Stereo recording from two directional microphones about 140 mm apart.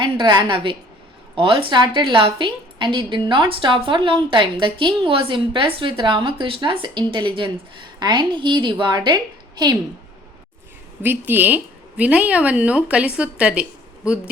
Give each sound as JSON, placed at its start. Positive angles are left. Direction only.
{"t": 0.0, "sound": "a woman's voice", "side_deg": -35}
{"t": 11.0, "sound": "a woman's voice", "side_deg": -15}